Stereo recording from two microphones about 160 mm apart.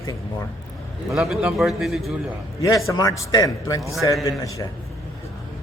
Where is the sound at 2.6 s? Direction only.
20° left (ahead or behind).